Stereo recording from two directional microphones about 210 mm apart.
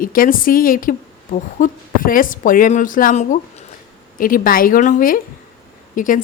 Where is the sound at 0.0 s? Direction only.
40° left (ahead or behind).